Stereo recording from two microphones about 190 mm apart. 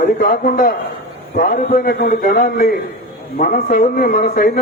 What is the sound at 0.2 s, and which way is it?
A man's voice, 50° left (ahead or behind).